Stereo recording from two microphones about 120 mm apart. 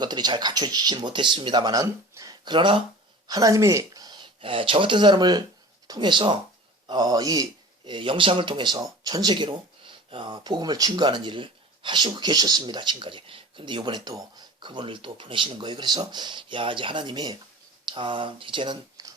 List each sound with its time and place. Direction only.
0.0 s speech: 35° right (ahead or behind)
3.2 s speech: 30° right (ahead or behind)
7.9 s speech: 45° right (ahead or behind)